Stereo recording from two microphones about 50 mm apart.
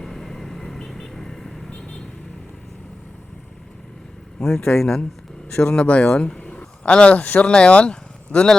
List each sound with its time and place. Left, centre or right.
0.0 s vehicle: centre
4.4 s speech: centre
5.5 s speech: left